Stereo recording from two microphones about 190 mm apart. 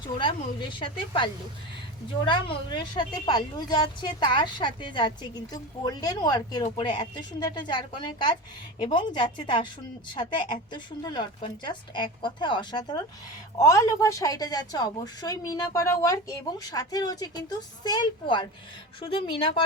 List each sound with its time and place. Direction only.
0.0 s a woman's voice: 25° left (ahead or behind)